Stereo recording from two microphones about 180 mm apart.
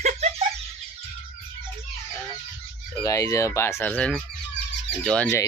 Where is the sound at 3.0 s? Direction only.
20° left (ahead or behind).